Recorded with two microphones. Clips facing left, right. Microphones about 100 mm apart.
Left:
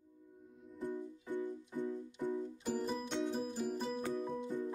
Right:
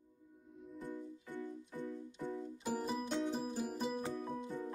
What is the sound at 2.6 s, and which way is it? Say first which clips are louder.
Music: right 2 dB; 5° right (ahead or behind).